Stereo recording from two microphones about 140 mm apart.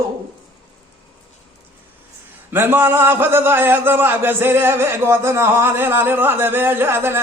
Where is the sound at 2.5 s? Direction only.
15° right (ahead or behind).